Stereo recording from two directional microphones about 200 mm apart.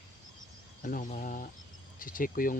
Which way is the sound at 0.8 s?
40° left (ahead or behind).